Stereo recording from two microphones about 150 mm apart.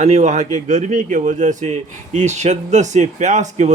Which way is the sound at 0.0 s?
50° right (ahead or behind).